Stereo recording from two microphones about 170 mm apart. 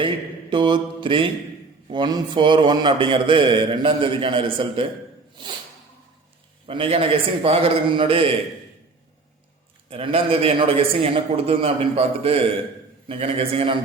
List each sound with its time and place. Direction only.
0.5 s mantra: 30° right (ahead or behind)
1.9 s a man's voice: 25° right (ahead or behind)
6.7 s a man's voice: 30° right (ahead or behind)
9.9 s a man's voice: 35° right (ahead or behind)